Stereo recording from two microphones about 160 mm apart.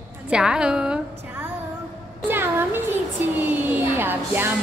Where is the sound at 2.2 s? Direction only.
15° right (ahead or behind).